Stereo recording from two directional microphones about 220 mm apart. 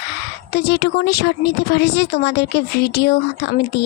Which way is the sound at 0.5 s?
45° left (ahead or behind).